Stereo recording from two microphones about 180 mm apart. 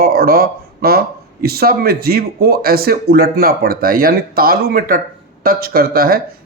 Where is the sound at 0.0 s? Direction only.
55° right (ahead or behind).